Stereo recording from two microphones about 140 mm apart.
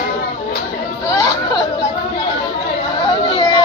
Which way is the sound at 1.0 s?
25° left (ahead or behind).